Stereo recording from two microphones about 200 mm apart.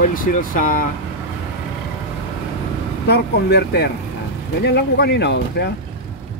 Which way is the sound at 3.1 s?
55° left (ahead or behind).